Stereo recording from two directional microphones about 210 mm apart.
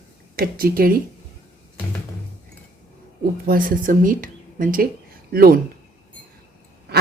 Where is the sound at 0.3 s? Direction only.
45° right (ahead or behind).